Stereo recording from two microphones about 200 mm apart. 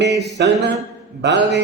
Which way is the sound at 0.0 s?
55° right (ahead or behind).